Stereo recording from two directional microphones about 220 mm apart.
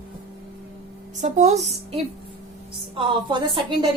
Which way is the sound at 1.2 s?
30° right (ahead or behind).